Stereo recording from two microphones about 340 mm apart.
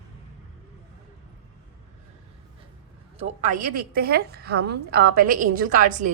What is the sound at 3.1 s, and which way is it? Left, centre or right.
A woman's voice, right.